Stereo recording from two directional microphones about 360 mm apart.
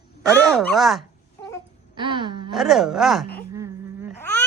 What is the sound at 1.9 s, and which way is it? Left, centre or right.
Wail, centre.